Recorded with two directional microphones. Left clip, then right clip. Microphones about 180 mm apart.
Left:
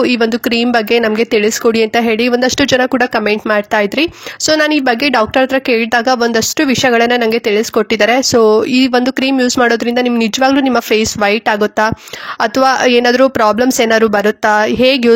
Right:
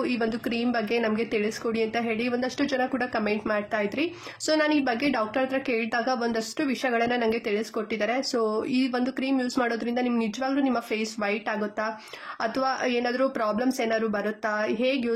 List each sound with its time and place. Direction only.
0.0 s speech: 55° left (ahead or behind)